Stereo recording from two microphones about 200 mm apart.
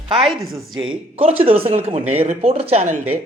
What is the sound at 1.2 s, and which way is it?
A man's voice, 30° right (ahead or behind).